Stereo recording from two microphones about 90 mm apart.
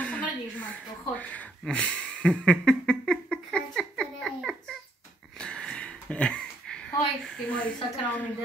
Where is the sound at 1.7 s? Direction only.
10° left (ahead or behind).